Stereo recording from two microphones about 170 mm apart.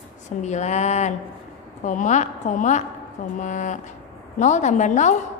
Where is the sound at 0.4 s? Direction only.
45° left (ahead or behind).